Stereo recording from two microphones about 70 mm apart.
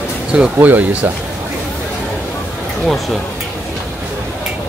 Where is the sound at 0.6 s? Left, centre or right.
Right.